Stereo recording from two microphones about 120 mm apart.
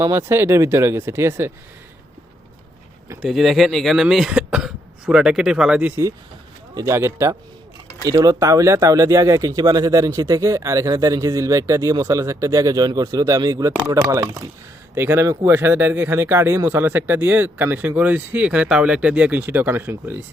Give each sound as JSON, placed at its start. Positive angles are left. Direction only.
{"t": 0.0, "sound": "speech", "side_deg": -25}
{"t": 3.2, "sound": "speech", "side_deg": 0}
{"t": 6.7, "sound": "speech", "side_deg": -25}